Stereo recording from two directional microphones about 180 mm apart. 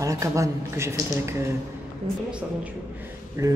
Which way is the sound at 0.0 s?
15° right (ahead or behind).